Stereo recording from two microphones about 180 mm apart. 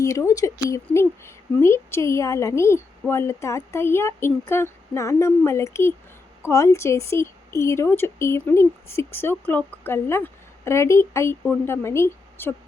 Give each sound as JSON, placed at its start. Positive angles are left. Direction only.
{"t": 0.0, "sound": "speech", "side_deg": 15}